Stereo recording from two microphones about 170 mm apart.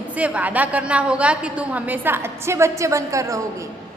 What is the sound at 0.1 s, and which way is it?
A woman's voice, 10° right (ahead or behind).